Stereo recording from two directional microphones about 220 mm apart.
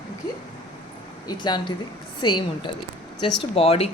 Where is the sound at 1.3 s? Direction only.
20° left (ahead or behind).